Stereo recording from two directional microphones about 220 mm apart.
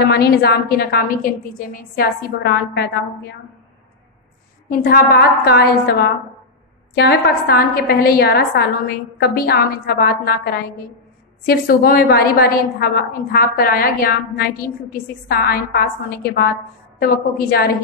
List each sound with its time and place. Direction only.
0.0 s a woman's voice: 45° left (ahead or behind)
4.6 s a woman's voice: 40° left (ahead or behind)